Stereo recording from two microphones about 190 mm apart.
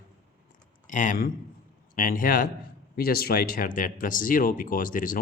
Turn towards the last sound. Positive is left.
turn(degrees=45)  # may be behind; listen again after turning